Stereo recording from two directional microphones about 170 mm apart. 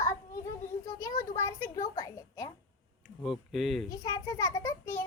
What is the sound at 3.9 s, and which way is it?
A child's voice, 20° left (ahead or behind).